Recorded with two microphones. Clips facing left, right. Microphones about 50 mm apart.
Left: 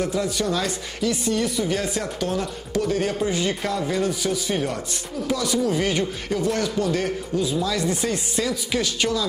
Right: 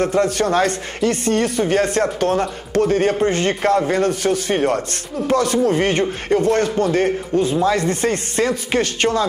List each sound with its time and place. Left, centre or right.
0.0 s speech: right